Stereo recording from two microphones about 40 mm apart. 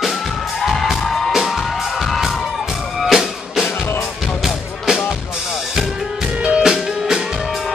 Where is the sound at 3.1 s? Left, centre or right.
Centre.